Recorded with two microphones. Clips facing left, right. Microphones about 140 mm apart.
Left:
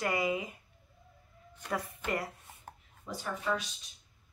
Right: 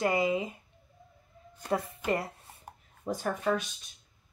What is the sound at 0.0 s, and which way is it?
Speech, 25° right (ahead or behind).